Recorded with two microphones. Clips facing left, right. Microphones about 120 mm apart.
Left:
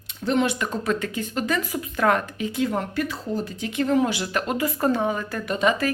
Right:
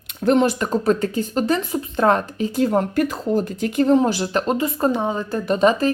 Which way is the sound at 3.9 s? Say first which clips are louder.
Right 4 dB; 30° right (ahead or behind).